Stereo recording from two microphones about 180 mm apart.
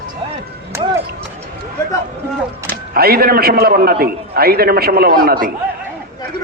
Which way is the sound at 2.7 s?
55° right (ahead or behind).